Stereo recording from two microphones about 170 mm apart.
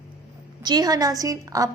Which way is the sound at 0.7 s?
25° right (ahead or behind).